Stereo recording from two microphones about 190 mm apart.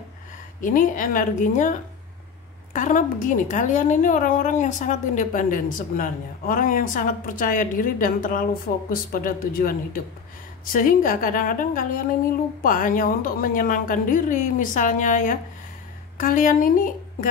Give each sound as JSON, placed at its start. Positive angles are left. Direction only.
{"t": 0.6, "sound": "a woman's voice", "side_deg": 45}